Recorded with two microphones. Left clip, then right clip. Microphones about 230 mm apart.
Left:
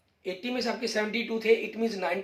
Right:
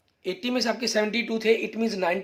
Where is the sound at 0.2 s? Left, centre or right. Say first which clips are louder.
Right 4 dB; right.